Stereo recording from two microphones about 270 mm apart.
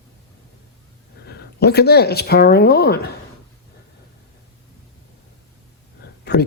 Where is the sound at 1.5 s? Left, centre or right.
Left.